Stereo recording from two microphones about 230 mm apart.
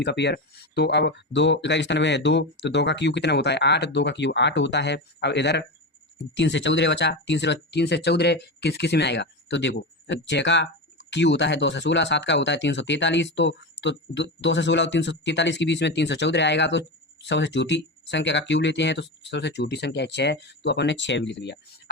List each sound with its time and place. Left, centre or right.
0.0 s speech: left